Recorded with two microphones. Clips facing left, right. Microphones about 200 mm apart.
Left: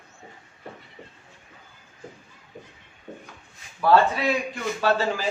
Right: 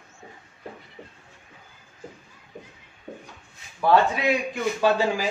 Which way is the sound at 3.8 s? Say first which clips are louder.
Left 1 dB; 15° right (ahead or behind).